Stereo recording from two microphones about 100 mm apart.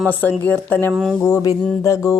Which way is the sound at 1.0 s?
5° left (ahead or behind).